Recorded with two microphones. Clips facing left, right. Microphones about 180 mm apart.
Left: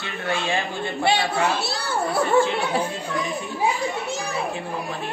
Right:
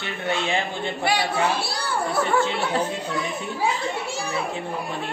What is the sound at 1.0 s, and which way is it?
Speech, 25° left (ahead or behind).